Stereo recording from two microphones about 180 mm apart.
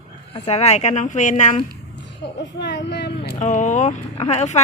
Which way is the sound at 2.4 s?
70° left (ahead or behind).